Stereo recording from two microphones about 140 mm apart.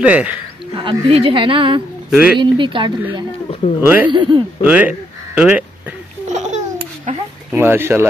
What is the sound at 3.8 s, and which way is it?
Speech, 10° right (ahead or behind).